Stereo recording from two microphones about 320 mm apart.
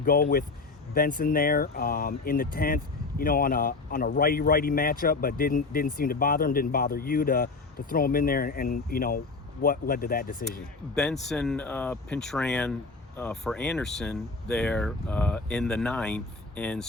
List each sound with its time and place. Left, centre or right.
0.0 s speech: left
10.9 s speech: centre